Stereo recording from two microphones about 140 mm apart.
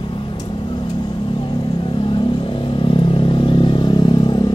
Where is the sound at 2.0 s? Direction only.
35° left (ahead or behind).